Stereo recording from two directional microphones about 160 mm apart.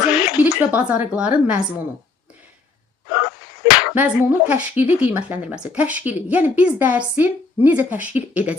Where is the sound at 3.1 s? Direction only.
20° right (ahead or behind).